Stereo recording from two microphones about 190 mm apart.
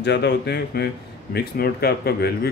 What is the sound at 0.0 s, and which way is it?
Speech, 60° left (ahead or behind).